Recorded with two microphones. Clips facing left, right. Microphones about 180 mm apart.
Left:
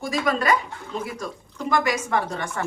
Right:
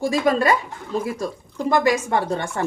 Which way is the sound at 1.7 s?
30° right (ahead or behind).